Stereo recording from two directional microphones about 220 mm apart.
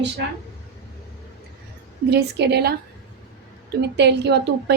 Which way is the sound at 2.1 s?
50° right (ahead or behind).